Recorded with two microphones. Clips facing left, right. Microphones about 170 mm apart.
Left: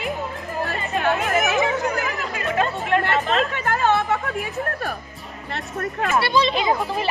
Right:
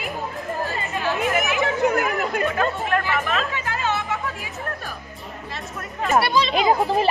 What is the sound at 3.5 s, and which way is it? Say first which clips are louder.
Music: left 5 dB; 55° left (ahead or behind).